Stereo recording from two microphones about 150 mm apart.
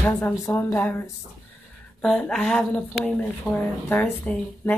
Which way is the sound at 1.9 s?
5° left (ahead or behind).